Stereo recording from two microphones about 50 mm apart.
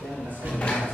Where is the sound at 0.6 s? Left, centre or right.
Centre.